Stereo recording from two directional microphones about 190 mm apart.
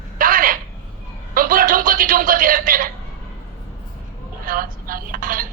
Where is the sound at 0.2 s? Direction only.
45° right (ahead or behind).